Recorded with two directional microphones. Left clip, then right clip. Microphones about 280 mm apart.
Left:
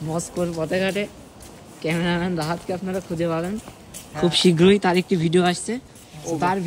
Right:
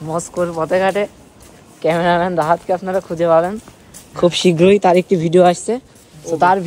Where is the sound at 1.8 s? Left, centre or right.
Centre.